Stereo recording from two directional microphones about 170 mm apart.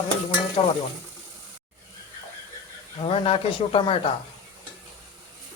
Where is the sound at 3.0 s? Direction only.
35° left (ahead or behind).